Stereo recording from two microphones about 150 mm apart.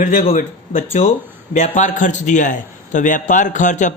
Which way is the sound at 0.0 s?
55° left (ahead or behind).